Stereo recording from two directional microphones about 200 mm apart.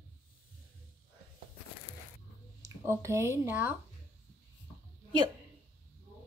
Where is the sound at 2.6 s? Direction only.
15° right (ahead or behind).